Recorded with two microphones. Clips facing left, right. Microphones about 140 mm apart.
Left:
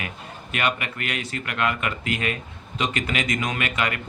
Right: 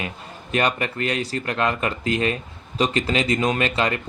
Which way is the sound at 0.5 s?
35° right (ahead or behind).